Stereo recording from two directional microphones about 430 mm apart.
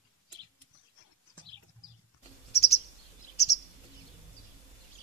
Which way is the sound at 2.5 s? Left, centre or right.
Centre.